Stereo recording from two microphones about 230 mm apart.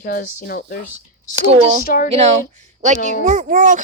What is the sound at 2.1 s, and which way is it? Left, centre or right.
Speech, right.